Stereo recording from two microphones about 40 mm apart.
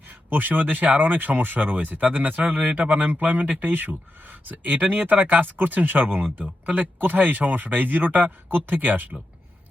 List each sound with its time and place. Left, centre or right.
0.1 s speech: right